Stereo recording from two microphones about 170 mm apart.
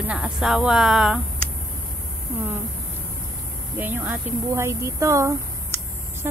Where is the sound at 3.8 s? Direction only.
10° right (ahead or behind).